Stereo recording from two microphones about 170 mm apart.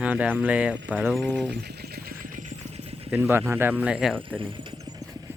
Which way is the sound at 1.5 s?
65° right (ahead or behind).